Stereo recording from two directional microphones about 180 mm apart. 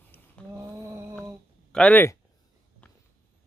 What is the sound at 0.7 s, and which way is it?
Mantra, 15° right (ahead or behind).